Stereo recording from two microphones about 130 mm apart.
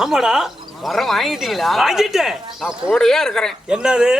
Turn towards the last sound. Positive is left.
turn(degrees=-5)  # may be behind; listen again after turning